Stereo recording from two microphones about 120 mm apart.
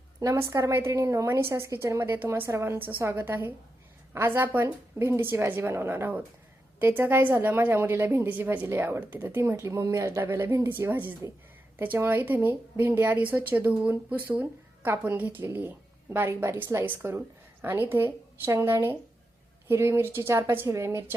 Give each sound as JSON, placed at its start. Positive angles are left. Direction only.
{"t": 0.2, "sound": "a woman's voice", "side_deg": -25}